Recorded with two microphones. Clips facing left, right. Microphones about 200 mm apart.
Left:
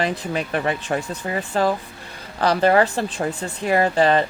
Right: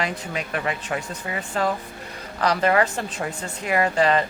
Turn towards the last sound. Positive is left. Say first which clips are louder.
# left 3 dB
turn(degrees=30)  # may be behind; listen again after turning